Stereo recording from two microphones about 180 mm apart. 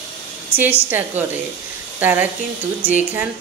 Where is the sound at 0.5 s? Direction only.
10° right (ahead or behind).